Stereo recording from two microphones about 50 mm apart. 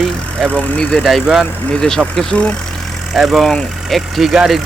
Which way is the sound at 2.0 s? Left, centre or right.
Centre.